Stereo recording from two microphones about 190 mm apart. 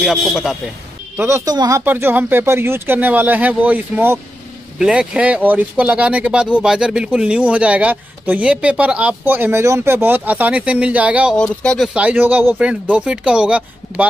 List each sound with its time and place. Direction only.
0.0 s speech: centre (ahead or behind)
1.1 s speech: 15° right (ahead or behind)
11.3 s speech: 5° left (ahead or behind)